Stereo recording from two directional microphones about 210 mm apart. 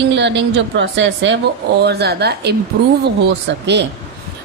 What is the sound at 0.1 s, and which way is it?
A woman's voice, 55° right (ahead or behind).